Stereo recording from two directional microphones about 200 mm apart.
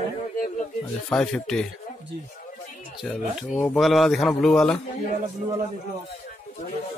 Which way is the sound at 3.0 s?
5° left (ahead or behind).